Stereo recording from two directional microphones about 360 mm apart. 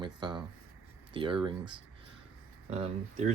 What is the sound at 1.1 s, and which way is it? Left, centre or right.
Speech, centre.